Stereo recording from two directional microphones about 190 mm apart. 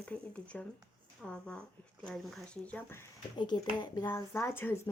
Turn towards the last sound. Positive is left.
turn(degrees=10)  # may be behind; listen again after turning